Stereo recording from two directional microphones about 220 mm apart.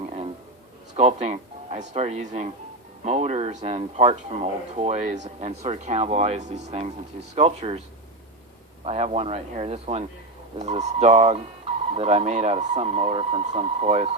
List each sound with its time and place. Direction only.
0.9 s speech: 30° right (ahead or behind)
8.8 s speech: 30° right (ahead or behind)